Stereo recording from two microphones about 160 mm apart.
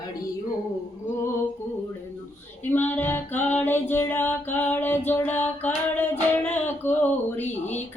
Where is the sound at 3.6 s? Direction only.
15° left (ahead or behind).